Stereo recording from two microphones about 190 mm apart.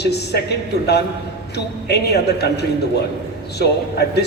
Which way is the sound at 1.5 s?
60° left (ahead or behind).